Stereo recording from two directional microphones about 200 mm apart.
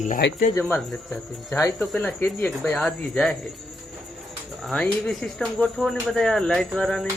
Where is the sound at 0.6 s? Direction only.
5° left (ahead or behind).